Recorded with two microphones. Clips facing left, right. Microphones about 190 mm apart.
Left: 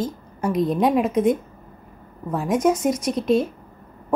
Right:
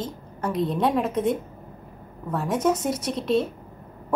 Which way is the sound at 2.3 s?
10° left (ahead or behind).